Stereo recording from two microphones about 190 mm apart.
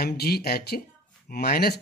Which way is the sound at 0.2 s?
55° left (ahead or behind).